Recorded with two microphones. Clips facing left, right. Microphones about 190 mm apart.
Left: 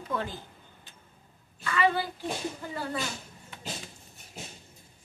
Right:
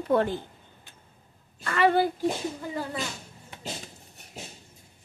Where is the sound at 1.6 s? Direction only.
50° right (ahead or behind).